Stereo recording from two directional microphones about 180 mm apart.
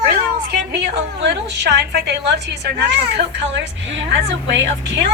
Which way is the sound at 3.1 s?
75° right (ahead or behind).